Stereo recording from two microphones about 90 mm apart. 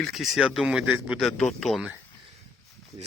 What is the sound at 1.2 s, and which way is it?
Speech, 5° left (ahead or behind).